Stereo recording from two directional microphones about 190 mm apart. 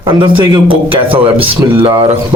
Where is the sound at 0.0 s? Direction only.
25° right (ahead or behind).